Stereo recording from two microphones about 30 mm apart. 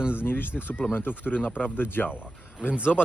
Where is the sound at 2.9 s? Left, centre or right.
Left.